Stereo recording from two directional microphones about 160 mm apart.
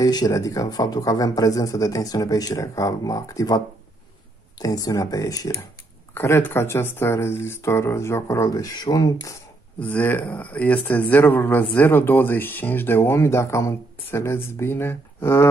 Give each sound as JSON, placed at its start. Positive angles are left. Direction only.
{"t": 0.0, "sound": "a man's voice", "side_deg": 25}
{"t": 9.8, "sound": "speech", "side_deg": 10}